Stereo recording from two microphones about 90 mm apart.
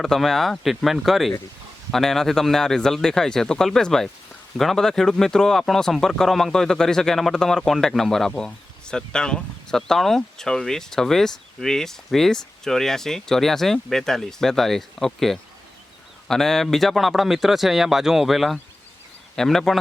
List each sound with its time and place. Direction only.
0.0 s speech: 5° left (ahead or behind)